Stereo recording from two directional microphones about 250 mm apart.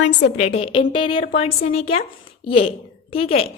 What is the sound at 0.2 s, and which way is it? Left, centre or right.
A woman's voice, left.